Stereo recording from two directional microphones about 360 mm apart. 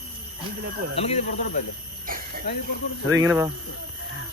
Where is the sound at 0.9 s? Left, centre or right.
Centre.